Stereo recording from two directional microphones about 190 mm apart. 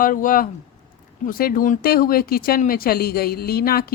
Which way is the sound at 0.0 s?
45° left (ahead or behind).